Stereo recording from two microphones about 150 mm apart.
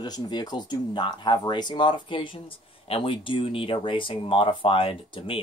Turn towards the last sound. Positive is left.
turn(degrees=35)  # may be behind; listen again after turning